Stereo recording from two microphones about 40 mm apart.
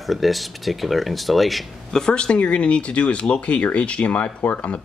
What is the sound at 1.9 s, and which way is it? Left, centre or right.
Speech, left.